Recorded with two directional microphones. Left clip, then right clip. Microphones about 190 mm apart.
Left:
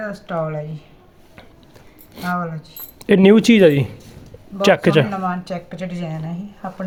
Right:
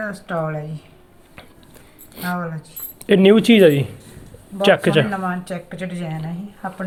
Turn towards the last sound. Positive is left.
turn(degrees=10)  # may be behind; listen again after turning